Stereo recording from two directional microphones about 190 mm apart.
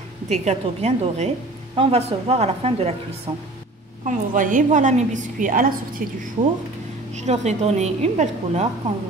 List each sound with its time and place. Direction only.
0.3 s a woman's voice: 35° right (ahead or behind)
3.3 s speech: 20° right (ahead or behind)
4.0 s a woman's voice: 45° right (ahead or behind)
7.2 s a woman's voice: 35° right (ahead or behind)